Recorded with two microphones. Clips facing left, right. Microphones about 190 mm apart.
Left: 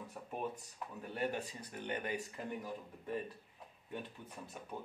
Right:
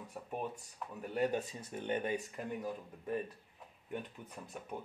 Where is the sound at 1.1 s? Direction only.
20° right (ahead or behind).